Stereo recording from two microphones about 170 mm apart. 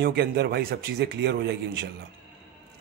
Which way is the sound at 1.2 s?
75° right (ahead or behind).